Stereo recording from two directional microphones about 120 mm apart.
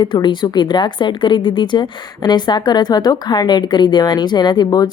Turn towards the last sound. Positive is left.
turn(degrees=35)  # may be behind; listen again after turning